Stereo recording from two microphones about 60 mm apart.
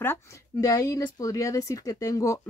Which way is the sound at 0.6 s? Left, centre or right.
Left.